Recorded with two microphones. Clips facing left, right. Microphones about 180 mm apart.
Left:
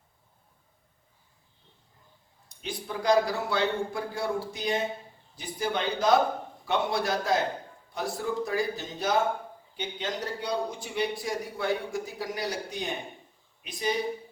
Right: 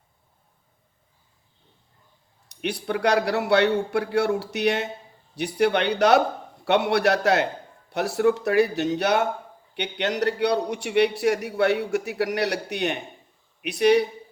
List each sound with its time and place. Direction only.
2.5 s a man's voice: 70° right (ahead or behind)